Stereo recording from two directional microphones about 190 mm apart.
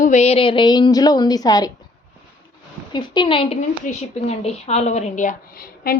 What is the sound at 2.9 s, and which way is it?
A woman's voice, 25° left (ahead or behind).